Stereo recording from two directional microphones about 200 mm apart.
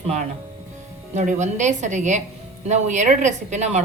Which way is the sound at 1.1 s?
35° right (ahead or behind).